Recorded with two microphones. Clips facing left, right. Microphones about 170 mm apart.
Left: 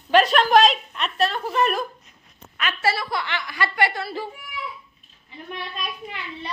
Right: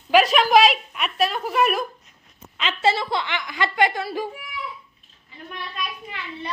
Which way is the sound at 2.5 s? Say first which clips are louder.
Right 3 dB; 20° right (ahead or behind).